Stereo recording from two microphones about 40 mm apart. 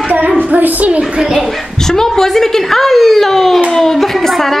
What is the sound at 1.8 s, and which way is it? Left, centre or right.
A woman's voice, centre.